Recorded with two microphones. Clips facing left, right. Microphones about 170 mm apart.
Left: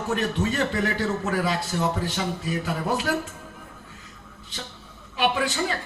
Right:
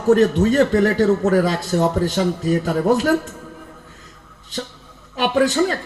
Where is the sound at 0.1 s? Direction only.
40° right (ahead or behind).